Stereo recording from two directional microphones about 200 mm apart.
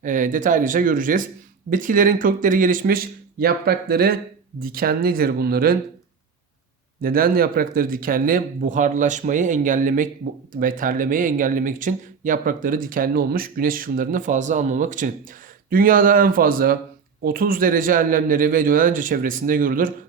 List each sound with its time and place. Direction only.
0.0 s speech: 40° right (ahead or behind)
7.0 s speech: 45° right (ahead or behind)